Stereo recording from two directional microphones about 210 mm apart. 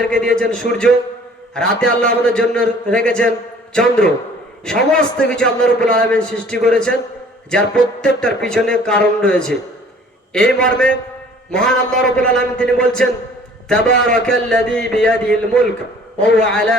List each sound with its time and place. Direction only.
0.0 s a man's voice: 5° left (ahead or behind)